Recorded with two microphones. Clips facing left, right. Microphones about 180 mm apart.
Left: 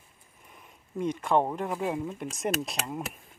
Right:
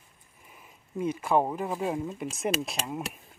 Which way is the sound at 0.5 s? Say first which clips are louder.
Even; 5° right (ahead or behind).